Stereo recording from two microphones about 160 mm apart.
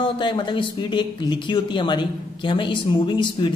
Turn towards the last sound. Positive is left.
turn(degrees=30)  # may be behind; listen again after turning